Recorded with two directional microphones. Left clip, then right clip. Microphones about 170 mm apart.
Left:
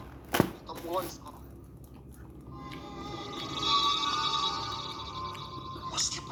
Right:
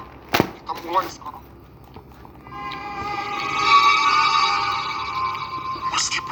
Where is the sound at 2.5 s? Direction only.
25° right (ahead or behind).